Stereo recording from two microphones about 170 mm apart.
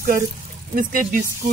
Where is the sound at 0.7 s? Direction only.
55° right (ahead or behind).